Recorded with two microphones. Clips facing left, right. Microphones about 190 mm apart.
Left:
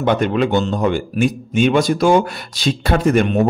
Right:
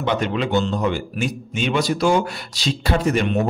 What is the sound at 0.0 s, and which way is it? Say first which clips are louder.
A man's voice: left 5 dB; 50° left (ahead or behind).